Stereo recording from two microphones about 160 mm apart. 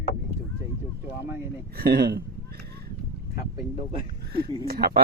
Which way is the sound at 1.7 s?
85° right.